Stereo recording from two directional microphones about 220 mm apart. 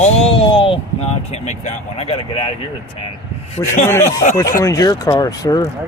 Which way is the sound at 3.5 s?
35° left (ahead or behind).